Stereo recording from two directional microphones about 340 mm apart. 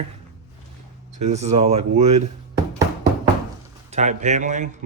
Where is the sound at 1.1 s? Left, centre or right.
Centre.